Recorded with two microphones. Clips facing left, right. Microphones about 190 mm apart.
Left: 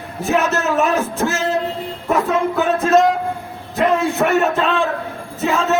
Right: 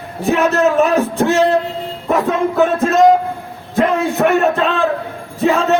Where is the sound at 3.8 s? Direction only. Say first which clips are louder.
Right 2 dB; centre (ahead or behind).